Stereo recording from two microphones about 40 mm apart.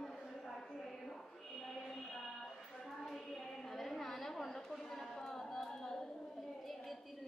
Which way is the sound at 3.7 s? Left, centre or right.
Centre.